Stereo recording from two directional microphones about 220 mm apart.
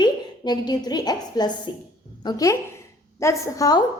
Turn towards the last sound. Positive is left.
turn(degrees=15)  # may be behind; listen again after turning